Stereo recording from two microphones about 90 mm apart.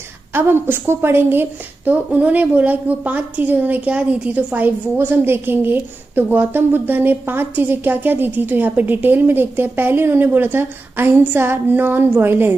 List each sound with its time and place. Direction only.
0.3 s a woman's voice: 20° right (ahead or behind)